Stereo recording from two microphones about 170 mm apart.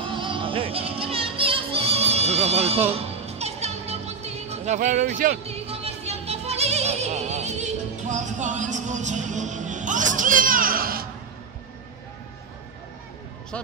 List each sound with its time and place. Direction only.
0.0 s music: 30° right (ahead or behind); by 5.4 s 50° right (ahead or behind)
5.4 s music: 35° right (ahead or behind); by 11.1 s 60° right (ahead or behind)